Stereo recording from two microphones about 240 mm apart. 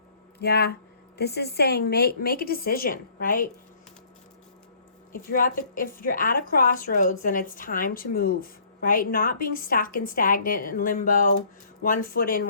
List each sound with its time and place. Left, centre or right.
0.3 s a woman's voice: left
5.1 s a woman's voice: left